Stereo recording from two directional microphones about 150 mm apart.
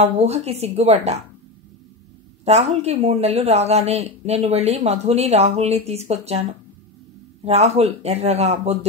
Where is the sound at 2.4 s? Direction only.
45° right (ahead or behind).